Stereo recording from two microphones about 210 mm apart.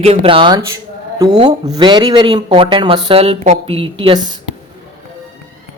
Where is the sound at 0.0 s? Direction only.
25° right (ahead or behind).